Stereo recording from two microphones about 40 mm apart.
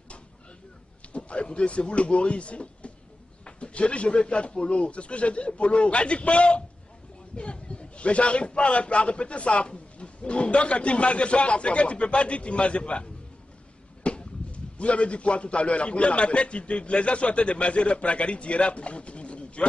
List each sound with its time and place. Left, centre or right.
1.1 s a man's voice: left